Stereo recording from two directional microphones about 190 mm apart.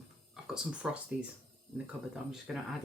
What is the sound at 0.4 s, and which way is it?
Speech, 5° right (ahead or behind).